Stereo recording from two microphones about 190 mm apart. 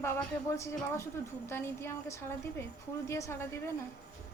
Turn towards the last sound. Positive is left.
turn(degrees=15)  # may be behind; listen again after turning